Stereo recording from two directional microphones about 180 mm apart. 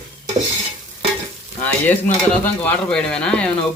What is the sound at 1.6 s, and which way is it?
Speech, 10° left (ahead or behind).